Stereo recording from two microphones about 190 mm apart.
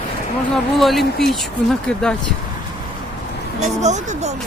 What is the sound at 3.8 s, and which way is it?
Speech, 35° right (ahead or behind).